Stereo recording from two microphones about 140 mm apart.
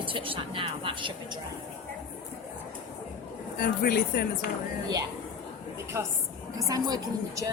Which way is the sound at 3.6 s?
90° left.